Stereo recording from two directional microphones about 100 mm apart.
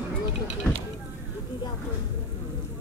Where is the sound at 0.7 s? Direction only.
10° left (ahead or behind).